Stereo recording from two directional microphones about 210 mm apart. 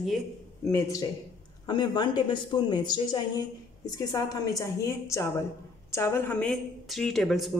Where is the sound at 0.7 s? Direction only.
15° left (ahead or behind).